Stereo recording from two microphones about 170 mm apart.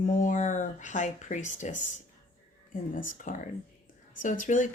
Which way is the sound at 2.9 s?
50° left (ahead or behind).